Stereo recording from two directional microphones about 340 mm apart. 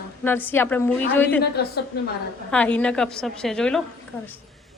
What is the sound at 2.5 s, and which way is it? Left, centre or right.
A woman's voice, centre.